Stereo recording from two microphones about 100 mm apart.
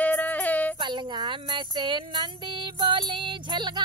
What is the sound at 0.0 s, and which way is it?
Yodeling, 15° left (ahead or behind).